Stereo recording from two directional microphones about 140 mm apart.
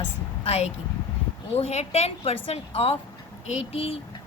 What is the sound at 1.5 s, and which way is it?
A woman's voice, 50° left (ahead or behind).